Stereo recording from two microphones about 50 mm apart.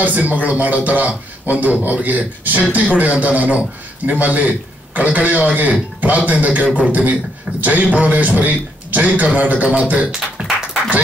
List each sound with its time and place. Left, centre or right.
0.0 s a man's voice: right